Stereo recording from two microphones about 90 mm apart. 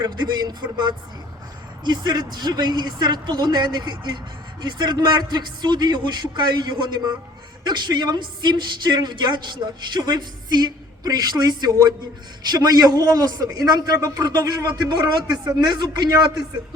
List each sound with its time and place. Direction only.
0.0 s a woman's voice: 55° right (ahead or behind)